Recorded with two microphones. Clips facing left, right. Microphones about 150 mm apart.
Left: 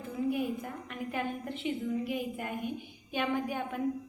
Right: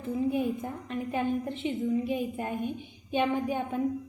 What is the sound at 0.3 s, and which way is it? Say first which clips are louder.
A woman's voice: right 3 dB; 25° right (ahead or behind).